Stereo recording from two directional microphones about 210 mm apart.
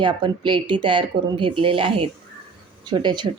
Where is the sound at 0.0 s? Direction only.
20° right (ahead or behind).